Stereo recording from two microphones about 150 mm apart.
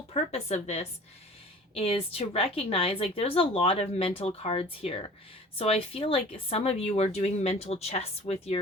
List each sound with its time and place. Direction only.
0.1 s a woman's voice: 45° left (ahead or behind)